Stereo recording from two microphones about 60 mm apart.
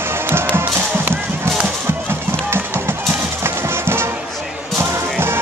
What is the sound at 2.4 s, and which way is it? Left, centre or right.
Music, right.